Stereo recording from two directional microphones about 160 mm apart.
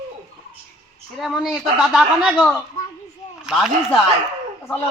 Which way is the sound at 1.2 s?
5° right (ahead or behind).